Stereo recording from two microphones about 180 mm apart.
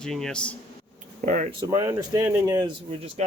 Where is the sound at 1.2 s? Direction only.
45° right (ahead or behind).